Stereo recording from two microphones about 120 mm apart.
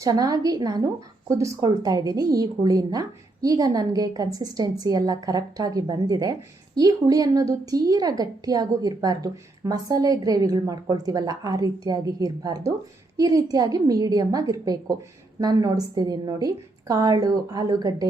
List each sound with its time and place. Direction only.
0.0 s a woman's voice: 30° right (ahead or behind)